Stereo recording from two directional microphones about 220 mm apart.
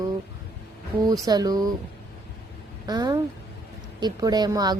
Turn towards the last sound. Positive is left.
turn(degrees=-20)  # may be behind; listen again after turning